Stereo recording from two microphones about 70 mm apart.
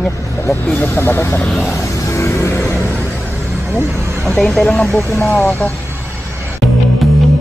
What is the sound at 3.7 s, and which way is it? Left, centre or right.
Speech, right.